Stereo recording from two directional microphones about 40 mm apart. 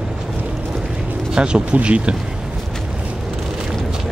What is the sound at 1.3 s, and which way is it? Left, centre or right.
Speech, right.